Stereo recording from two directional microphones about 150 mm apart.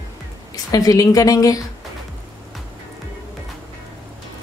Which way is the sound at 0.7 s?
25° left (ahead or behind).